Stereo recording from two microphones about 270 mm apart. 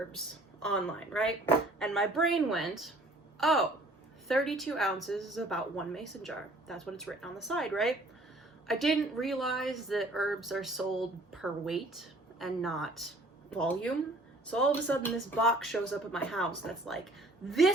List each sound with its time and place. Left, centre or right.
0.6 s a woman's voice: centre